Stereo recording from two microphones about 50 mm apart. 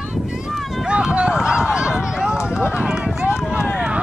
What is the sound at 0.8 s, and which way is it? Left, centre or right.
Speech, centre.